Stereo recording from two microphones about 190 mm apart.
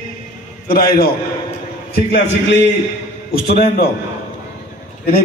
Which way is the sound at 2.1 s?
65° left (ahead or behind).